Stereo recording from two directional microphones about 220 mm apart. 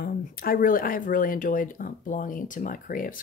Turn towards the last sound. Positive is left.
turn(degrees=40)  # may be behind; listen again after turning